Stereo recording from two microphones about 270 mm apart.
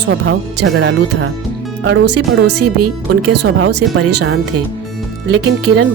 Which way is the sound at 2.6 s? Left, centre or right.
Right.